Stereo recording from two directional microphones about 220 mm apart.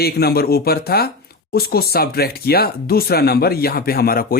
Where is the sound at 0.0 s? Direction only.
45° left (ahead or behind).